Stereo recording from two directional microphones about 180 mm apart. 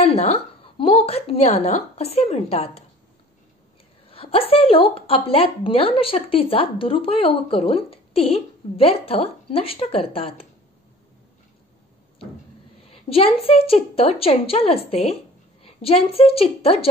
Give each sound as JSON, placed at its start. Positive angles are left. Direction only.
{"t": 0.0, "sound": "a woman's voice", "side_deg": 35}
{"t": 4.1, "sound": "a woman's voice", "side_deg": 30}
{"t": 12.9, "sound": "a woman's voice", "side_deg": 30}